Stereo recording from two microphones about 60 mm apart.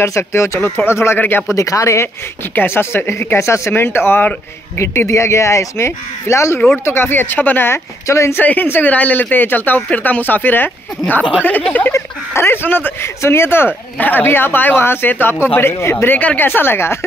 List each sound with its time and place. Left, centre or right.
0.0 s speech: left
0.6 s speech: left
1.5 s speech: left
2.5 s speech: left
3.8 s speech: left
4.7 s speech: left
8.4 s speech: left
11.9 s speech: left
13.9 s speech: left